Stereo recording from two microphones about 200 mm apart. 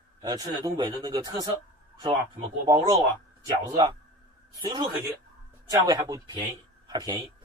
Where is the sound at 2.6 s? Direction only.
20° right (ahead or behind).